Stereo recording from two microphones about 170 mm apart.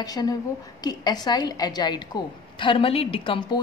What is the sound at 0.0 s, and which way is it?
A woman's voice, 20° left (ahead or behind).